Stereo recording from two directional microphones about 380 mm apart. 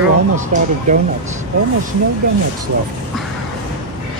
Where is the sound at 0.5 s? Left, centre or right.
Centre.